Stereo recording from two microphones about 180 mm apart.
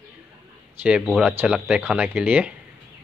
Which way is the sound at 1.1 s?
5° right (ahead or behind).